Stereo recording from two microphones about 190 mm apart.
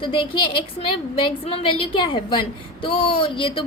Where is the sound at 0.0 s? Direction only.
25° left (ahead or behind).